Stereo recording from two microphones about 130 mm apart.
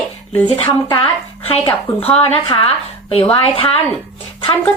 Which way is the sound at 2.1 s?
45° left (ahead or behind).